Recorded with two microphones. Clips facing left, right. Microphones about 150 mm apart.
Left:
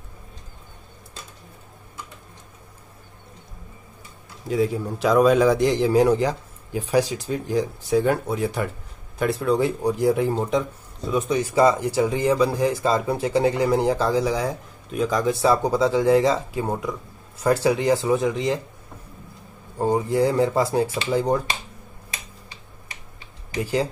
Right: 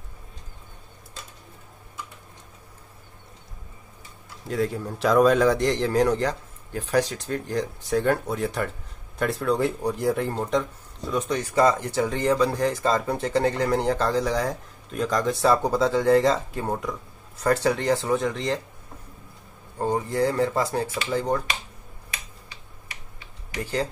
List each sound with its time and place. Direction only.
4.5 s speech: 5° left (ahead or behind)
19.8 s speech: 10° left (ahead or behind)
23.6 s speech: 10° left (ahead or behind)